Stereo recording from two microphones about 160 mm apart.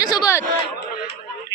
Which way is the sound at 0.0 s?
25° left (ahead or behind).